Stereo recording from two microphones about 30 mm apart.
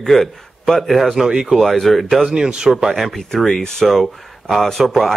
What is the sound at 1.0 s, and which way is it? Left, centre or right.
Speech, centre.